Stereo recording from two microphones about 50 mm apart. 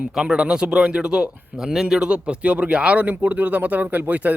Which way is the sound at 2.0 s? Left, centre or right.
Right.